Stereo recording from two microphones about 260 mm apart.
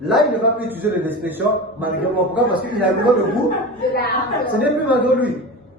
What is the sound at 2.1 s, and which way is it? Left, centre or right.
A man's voice, centre.